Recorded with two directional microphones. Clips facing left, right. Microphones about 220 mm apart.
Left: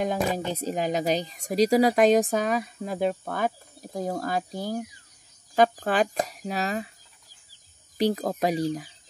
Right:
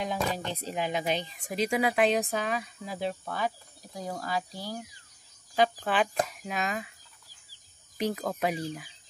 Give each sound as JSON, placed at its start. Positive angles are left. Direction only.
{"t": 0.2, "sound": "speech", "side_deg": 10}
{"t": 0.6, "sound": "speech", "side_deg": 40}
{"t": 8.0, "sound": "speech", "side_deg": 35}